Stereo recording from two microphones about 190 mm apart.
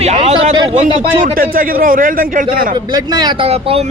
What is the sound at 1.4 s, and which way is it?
A man's voice, 50° right (ahead or behind).